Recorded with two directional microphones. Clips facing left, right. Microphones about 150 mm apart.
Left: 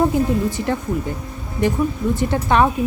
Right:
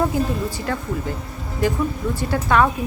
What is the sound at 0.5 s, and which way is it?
Speech, 20° left (ahead or behind).